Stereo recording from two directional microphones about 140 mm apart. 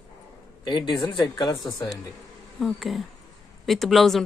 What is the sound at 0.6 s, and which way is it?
Speech, 30° left (ahead or behind).